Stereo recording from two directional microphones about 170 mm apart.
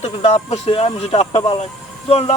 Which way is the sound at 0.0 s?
35° left (ahead or behind).